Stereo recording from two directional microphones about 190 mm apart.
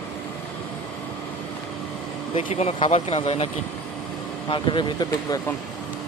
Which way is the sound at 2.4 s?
35° left (ahead or behind).